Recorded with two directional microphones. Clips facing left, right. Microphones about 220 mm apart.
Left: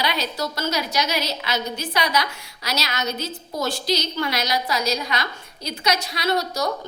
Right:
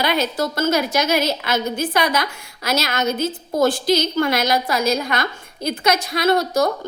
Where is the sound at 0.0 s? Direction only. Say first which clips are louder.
Right 5 dB; 50° right (ahead or behind).